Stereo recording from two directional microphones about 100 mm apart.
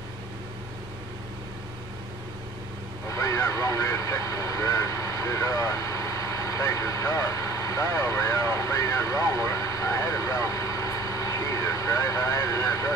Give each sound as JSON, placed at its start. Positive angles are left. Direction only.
{"t": 3.1, "sound": "vehicle", "side_deg": 30}